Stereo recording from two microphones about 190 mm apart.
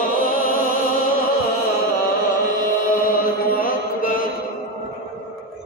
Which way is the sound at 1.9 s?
50° left (ahead or behind).